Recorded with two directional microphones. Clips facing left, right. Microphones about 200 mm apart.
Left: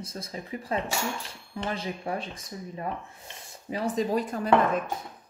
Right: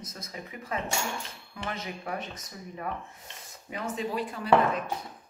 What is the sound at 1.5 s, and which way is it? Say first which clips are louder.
Rub: left 5 dB; 30° left (ahead or behind).